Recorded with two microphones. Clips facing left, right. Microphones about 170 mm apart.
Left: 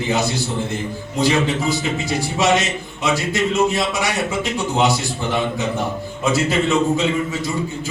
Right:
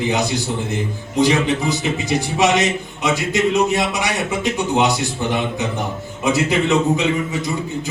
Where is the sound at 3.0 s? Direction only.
20° right (ahead or behind).